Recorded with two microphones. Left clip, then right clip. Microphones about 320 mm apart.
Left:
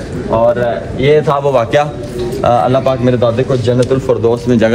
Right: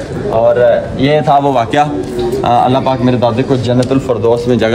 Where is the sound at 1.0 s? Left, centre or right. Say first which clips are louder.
Left 2 dB; centre.